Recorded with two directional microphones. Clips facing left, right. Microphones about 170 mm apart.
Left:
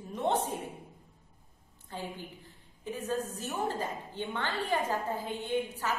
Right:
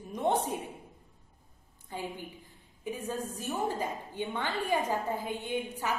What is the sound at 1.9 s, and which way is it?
A woman's voice, 15° right (ahead or behind).